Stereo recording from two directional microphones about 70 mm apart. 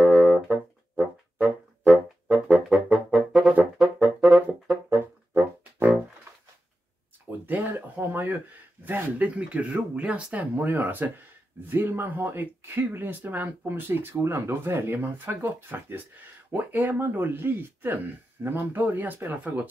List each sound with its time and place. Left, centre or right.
0.0 s music: right
3.7 s brass instrument: centre
4.3 s music: right
5.3 s music: right
7.2 s a sound: right
8.8 s speech: right